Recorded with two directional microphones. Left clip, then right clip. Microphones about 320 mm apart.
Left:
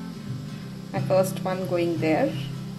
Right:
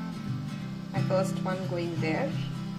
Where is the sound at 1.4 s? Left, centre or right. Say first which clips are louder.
Left 7 dB; left.